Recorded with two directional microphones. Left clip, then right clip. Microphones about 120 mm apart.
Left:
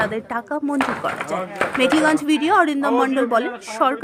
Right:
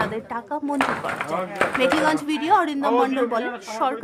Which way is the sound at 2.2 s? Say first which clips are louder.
Left 3 dB; 30° left (ahead or behind).